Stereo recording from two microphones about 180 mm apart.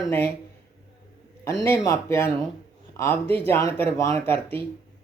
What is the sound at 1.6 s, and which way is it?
Speech, 15° left (ahead or behind).